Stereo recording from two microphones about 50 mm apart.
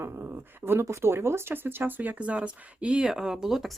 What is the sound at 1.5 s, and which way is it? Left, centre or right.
Speech, right.